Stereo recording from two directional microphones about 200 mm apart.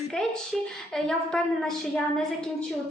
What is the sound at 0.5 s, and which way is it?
A woman's voice, centre (ahead or behind).